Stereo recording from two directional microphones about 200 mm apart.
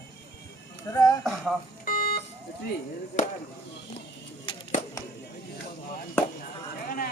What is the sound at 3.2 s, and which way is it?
Speech, 40° left (ahead or behind).